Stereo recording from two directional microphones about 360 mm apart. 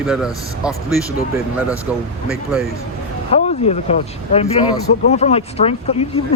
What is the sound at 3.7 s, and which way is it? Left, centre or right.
Speech, centre.